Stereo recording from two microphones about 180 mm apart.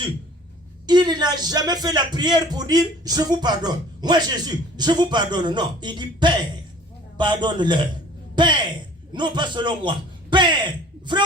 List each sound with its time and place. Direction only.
0.9 s speech: 25° right (ahead or behind)
9.1 s a man's voice: 25° right (ahead or behind)